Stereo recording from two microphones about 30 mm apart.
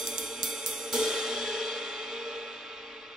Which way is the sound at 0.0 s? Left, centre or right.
Right.